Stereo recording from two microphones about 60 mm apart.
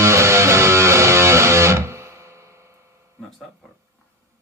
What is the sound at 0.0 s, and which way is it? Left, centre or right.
Music, right.